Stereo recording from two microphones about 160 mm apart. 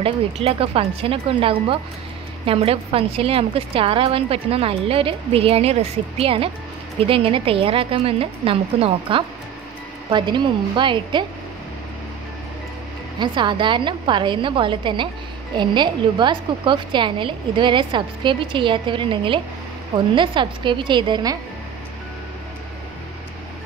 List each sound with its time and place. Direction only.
0.0 s a woman's voice: 35° right (ahead or behind)
13.2 s a woman's voice: 30° right (ahead or behind)